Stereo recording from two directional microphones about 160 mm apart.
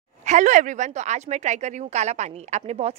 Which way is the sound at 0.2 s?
50° right (ahead or behind).